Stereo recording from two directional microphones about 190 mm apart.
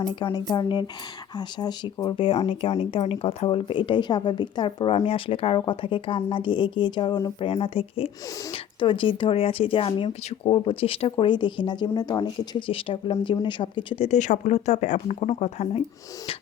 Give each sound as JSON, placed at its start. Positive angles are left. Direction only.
{"t": 0.0, "sound": "speech", "side_deg": 25}
{"t": 7.4, "sound": "speech", "side_deg": 30}